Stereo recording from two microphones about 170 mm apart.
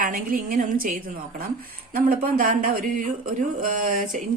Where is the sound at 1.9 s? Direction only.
60° right (ahead or behind).